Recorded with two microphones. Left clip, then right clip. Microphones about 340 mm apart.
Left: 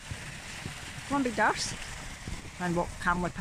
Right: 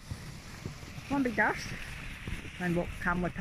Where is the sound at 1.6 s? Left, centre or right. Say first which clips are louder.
Left 3 dB; left.